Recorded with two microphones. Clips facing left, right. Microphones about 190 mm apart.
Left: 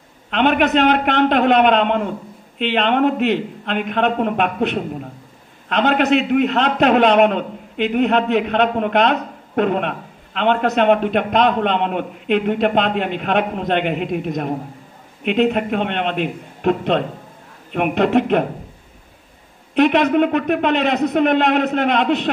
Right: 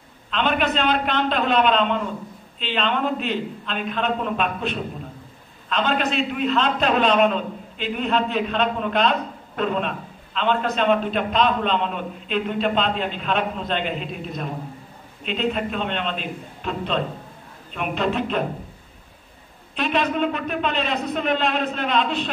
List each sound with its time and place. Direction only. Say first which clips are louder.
0.3 s a man's voice: left 7 dB; 70° left (ahead or behind)
19.7 s a man's voice: left 9 dB; 70° left (ahead or behind)